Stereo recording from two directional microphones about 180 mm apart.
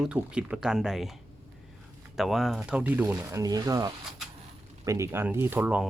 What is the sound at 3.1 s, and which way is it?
Speech, 20° right (ahead or behind).